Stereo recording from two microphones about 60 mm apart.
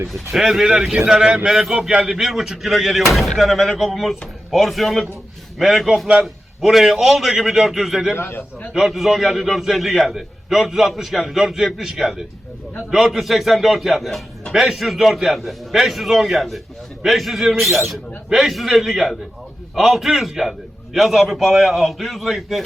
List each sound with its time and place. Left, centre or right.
0.1 s a man's voice: centre
8.1 s a man's voice: left
8.7 s a man's voice: centre